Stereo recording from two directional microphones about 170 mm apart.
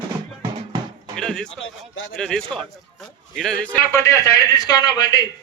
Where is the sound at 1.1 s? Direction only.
5° left (ahead or behind).